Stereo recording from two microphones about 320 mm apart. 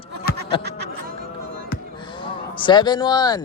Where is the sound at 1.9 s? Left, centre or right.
Centre.